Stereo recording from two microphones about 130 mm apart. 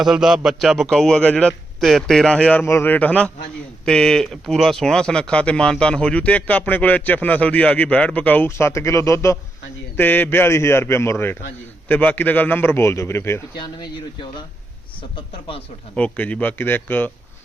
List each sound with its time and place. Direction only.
0.0 s a man's voice: 5° right (ahead or behind); by 13.4 s 20° left (ahead or behind)
13.6 s speech: 35° left (ahead or behind)
16.0 s speech: 10° left (ahead or behind)